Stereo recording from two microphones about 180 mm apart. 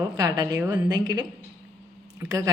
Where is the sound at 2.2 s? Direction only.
20° right (ahead or behind).